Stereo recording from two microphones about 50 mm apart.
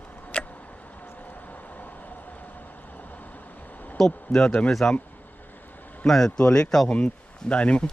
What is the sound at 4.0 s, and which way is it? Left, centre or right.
Speech, centre.